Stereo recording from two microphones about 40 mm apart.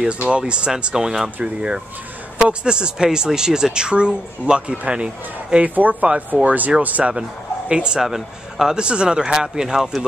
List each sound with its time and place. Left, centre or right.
0.1 s speech: right
5.8 s speech: right
7.1 s a man's voice: right
8.0 s speech: centre
8.7 s speech: right